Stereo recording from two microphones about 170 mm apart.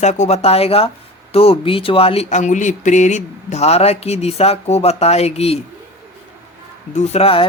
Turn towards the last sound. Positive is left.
turn(degrees=35)  # may be behind; listen again after turning